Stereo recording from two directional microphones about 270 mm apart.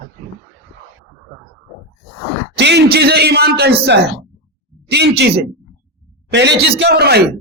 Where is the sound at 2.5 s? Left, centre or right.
Right.